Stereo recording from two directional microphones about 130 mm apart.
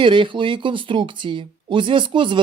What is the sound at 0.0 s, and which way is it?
Speech, 40° right (ahead or behind).